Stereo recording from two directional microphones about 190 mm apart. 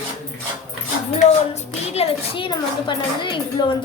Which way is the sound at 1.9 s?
30° left (ahead or behind).